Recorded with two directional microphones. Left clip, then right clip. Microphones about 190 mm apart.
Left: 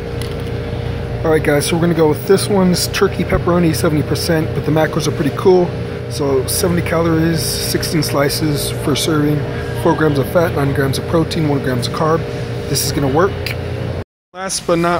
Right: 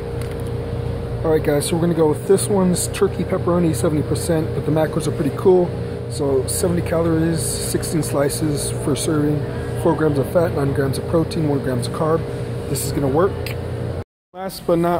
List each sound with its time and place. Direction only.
1.2 s speech: 5° right (ahead or behind)
6.8 s speech: centre (ahead or behind)
8.8 s speech: centre (ahead or behind)
14.7 s a man's voice: 20° right (ahead or behind)